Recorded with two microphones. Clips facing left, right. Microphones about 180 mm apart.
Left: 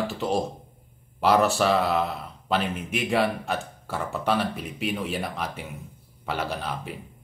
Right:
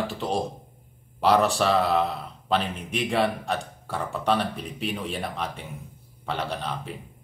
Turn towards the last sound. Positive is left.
turn(degrees=5)  # may be behind; listen again after turning